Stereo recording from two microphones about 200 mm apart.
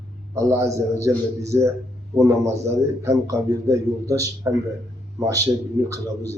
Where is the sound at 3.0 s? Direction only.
15° right (ahead or behind).